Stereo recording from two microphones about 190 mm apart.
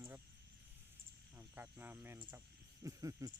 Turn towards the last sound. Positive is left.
turn(degrees=-15)  # may be behind; listen again after turning